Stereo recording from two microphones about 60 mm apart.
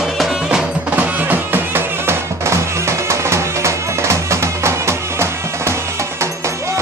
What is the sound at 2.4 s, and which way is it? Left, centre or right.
Music, right.